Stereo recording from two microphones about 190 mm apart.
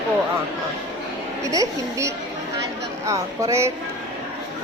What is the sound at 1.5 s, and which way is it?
A woman's voice, 15° right (ahead or behind).